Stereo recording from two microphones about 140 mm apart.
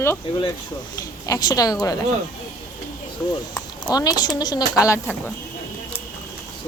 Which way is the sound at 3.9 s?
30° left (ahead or behind).